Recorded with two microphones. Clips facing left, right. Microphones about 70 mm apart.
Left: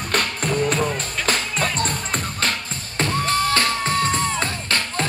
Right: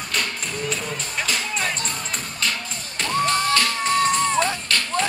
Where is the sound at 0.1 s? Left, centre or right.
Left.